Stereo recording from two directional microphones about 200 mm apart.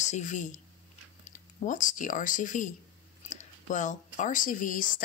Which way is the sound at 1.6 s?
40° left (ahead or behind).